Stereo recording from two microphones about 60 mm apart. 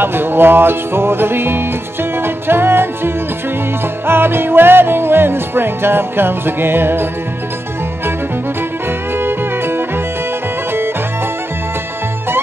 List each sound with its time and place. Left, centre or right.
0.0 s music: right
9.2 s music: right